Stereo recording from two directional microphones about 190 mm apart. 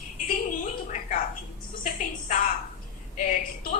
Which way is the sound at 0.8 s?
40° left (ahead or behind).